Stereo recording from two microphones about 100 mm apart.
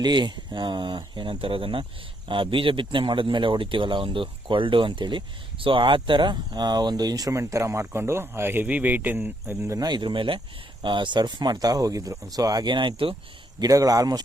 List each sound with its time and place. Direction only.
0.0 s speech: 50° right (ahead or behind); by 9.7 s 20° right (ahead or behind)
9.7 s speech: 45° right (ahead or behind)
13.6 s speech: 35° right (ahead or behind)